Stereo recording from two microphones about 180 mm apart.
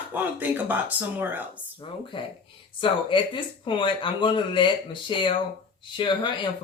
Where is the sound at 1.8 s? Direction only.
30° left (ahead or behind).